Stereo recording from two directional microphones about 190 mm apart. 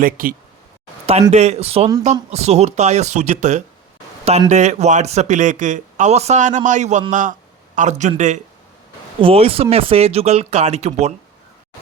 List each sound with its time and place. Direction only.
0.0 s speech: 50° right (ahead or behind)
1.3 s speech: 35° right (ahead or behind)